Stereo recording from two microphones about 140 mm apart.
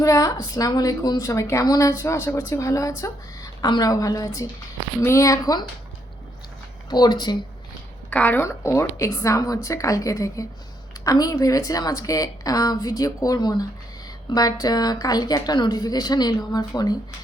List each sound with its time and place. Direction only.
0.0 s a woman's voice: 25° left (ahead or behind)
6.9 s speech: 30° left (ahead or behind)
8.1 s a woman's voice: 10° left (ahead or behind); by 17.0 s 25° left (ahead or behind)